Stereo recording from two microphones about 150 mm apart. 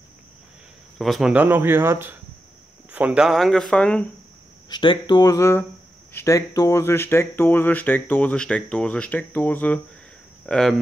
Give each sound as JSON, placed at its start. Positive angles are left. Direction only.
{"t": 0.9, "sound": "speech", "side_deg": 0}
{"t": 4.6, "sound": "speech", "side_deg": 30}